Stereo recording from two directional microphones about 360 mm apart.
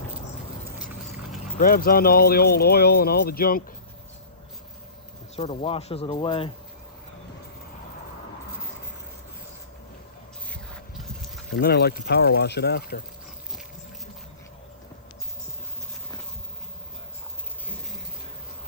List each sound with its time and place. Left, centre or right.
1.5 s speech: left
5.4 s speech: centre
10.5 s a sound: centre
11.5 s speech: left